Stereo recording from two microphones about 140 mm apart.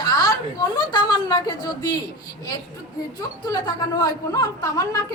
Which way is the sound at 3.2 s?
30° left (ahead or behind).